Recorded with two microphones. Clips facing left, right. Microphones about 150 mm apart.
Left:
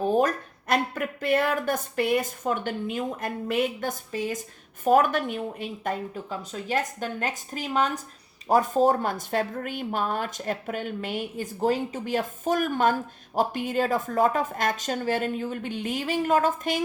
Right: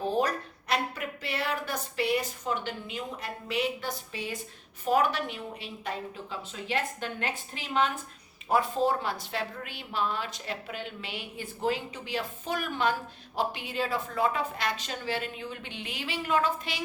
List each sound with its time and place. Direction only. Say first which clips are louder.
0.1 s speech: left 5 dB; 45° left (ahead or behind)